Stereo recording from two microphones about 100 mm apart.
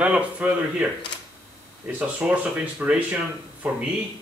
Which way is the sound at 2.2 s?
10° right (ahead or behind).